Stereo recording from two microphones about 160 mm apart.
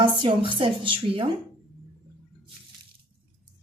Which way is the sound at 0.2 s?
30° right (ahead or behind).